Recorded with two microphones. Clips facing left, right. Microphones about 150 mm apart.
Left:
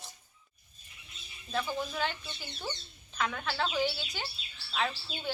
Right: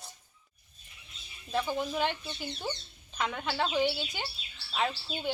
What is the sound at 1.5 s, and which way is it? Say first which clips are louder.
A woman's voice: right 3 dB; 15° right (ahead or behind).